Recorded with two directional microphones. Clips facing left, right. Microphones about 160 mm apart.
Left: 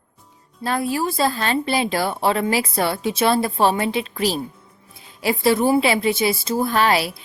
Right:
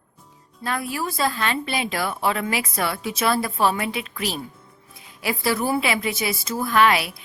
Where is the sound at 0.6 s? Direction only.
30° left (ahead or behind).